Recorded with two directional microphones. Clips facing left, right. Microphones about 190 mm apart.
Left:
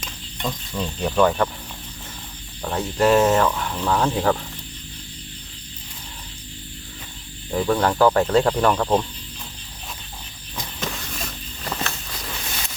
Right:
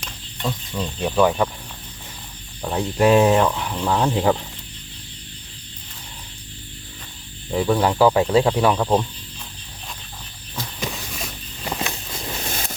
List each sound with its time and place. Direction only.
0.0 s speech: centre (ahead or behind)
2.6 s speech: 10° right (ahead or behind)
7.5 s speech: 10° right (ahead or behind)
10.8 s walk: 5° right (ahead or behind)
12.1 s a sound: 25° right (ahead or behind)